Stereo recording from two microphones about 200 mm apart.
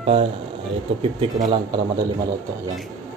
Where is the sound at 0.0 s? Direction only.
30° right (ahead or behind).